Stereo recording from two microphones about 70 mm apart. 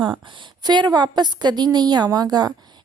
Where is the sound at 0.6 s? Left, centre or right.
Right.